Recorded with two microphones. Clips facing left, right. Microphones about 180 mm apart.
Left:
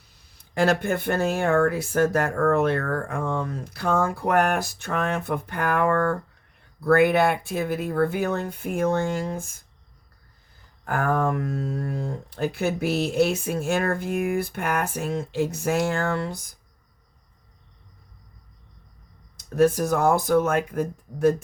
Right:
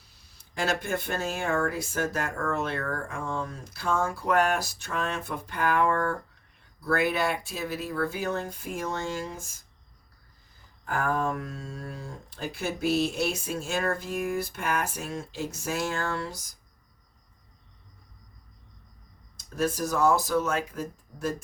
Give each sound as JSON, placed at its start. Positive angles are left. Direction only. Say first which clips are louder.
{"t": 0.5, "sound": "speech", "louder": "left 7 dB", "side_deg": 60}
{"t": 10.8, "sound": "speech", "louder": "left 4 dB", "side_deg": 60}
{"t": 19.5, "sound": "speech", "louder": "left 7 dB", "side_deg": 60}